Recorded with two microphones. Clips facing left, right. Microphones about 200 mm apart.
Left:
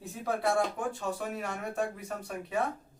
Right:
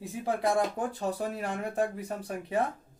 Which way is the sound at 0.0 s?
15° right (ahead or behind).